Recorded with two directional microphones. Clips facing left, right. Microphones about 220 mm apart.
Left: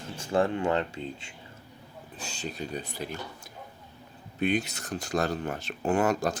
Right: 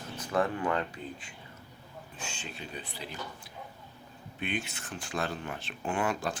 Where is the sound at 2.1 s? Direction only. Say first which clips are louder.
Left 6 dB; 35° left (ahead or behind).